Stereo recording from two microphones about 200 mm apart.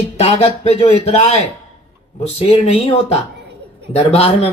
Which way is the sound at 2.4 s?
30° left (ahead or behind).